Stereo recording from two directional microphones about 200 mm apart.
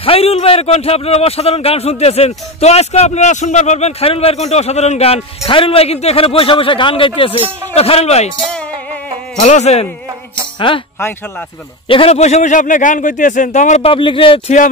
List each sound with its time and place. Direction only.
0.0 s speech: 30° left (ahead or behind)
8.5 s music: 5° left (ahead or behind)
9.4 s speech: 35° left (ahead or behind)
11.0 s speech: 10° left (ahead or behind)
11.9 s speech: 30° left (ahead or behind)